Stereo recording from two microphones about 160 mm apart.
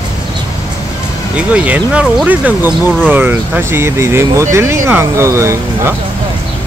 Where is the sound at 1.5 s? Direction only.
10° right (ahead or behind).